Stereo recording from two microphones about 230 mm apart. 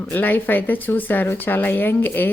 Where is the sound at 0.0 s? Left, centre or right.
Centre.